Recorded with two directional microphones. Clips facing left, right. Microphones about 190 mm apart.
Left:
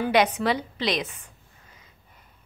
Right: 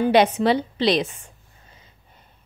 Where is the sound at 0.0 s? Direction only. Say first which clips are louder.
Right 5 dB; 25° right (ahead or behind).